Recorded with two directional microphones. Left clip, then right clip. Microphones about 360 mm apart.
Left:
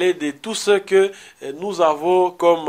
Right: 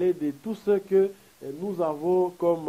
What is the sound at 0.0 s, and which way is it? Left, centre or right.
Speech, centre.